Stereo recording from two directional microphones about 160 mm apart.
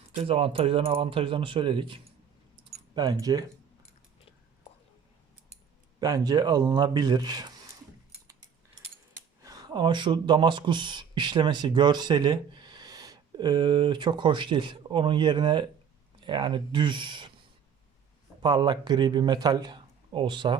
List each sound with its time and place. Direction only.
0.2 s speech: 35° right (ahead or behind)
6.0 s speech: 20° right (ahead or behind)
9.4 s speech: 25° right (ahead or behind)
18.4 s speech: 25° right (ahead or behind)